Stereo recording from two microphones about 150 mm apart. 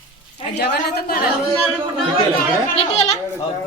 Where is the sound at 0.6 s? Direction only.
90° left.